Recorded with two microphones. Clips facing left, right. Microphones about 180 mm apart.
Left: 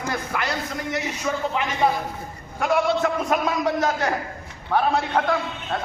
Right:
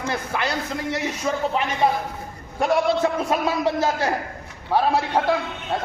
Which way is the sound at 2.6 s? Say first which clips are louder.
Right 1 dB; 30° right (ahead or behind).